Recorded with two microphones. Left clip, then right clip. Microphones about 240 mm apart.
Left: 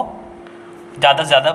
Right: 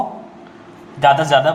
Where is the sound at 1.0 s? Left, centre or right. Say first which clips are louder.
Even; left.